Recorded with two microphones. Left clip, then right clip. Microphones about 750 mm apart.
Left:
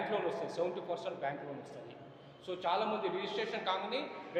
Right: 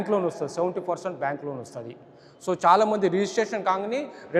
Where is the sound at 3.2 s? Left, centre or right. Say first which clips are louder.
Right 12 dB; right.